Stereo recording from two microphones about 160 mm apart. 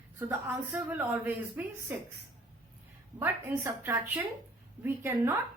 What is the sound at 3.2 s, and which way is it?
A woman's voice, 15° right (ahead or behind).